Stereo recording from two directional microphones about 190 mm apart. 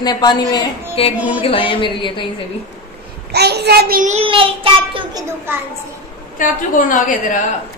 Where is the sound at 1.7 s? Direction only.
25° left (ahead or behind).